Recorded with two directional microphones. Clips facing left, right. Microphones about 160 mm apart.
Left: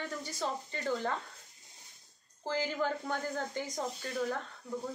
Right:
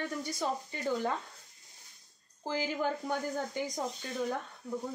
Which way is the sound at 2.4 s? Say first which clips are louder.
Even; 15° right (ahead or behind).